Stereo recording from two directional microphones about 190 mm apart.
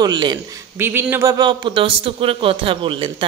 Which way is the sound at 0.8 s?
10° right (ahead or behind).